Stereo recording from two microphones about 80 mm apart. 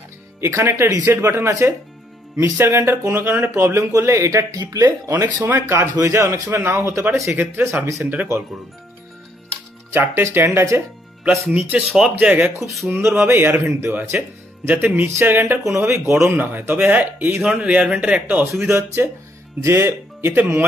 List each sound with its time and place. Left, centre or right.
0.4 s speech: right
3.1 s speech: right
4.5 s speech: right
5.4 s speech: right
5.9 s speech: right; by 8.5 s centre
9.9 s speech: right
11.3 s speech: centre
12.4 s speech: right
15.6 s speech: right
17.3 s speech: centre
18.7 s speech: right